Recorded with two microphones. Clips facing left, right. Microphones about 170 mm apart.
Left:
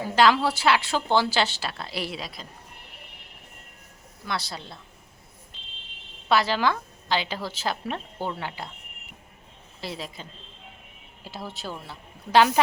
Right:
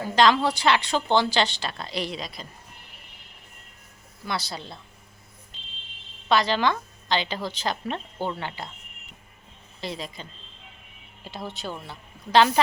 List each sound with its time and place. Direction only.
0.0 s a woman's voice: 5° left (ahead or behind)
4.3 s a woman's voice: centre (ahead or behind)
6.2 s a woman's voice: 5° left (ahead or behind)
9.8 s a woman's voice: 5° left (ahead or behind)